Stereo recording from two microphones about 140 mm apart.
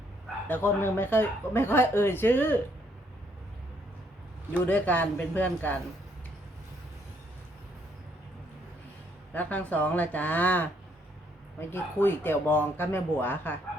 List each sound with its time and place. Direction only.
0.4 s a woman's voice: 15° left (ahead or behind)
4.6 s a woman's voice: 10° left (ahead or behind)
9.3 s a woman's voice: 10° left (ahead or behind)
11.7 s a woman's voice: 15° left (ahead or behind)